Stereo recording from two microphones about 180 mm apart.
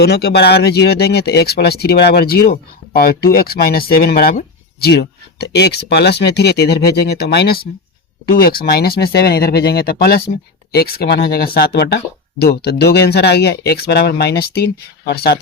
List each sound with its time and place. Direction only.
0.0 s speech: 65° left (ahead or behind)